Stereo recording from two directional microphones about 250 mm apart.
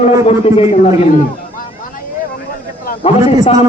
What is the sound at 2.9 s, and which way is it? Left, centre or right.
Speech, left.